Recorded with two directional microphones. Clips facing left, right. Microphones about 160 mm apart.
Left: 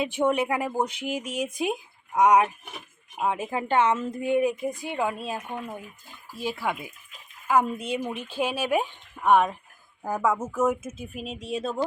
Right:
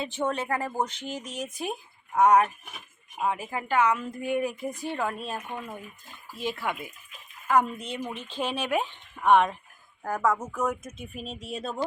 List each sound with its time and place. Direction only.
0.0 s speech: 10° left (ahead or behind)
6.4 s speech: 10° left (ahead or behind)